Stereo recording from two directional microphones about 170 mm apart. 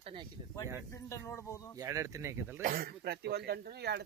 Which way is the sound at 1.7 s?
20° right (ahead or behind).